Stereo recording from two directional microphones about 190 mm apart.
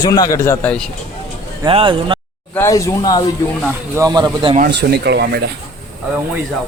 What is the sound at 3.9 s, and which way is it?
Speech, 20° right (ahead or behind).